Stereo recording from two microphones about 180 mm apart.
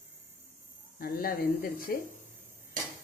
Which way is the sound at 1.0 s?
55° left (ahead or behind).